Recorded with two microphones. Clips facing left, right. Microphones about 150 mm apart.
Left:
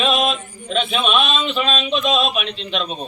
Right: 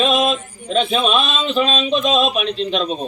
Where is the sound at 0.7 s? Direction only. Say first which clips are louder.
Right 3 dB; 40° right (ahead or behind).